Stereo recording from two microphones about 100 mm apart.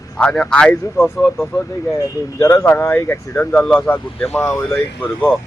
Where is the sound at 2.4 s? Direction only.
30° left (ahead or behind).